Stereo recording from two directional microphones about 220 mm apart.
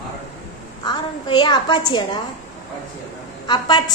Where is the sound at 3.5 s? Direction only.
20° left (ahead or behind).